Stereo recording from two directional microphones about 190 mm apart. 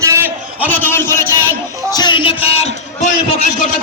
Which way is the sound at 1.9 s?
20° left (ahead or behind).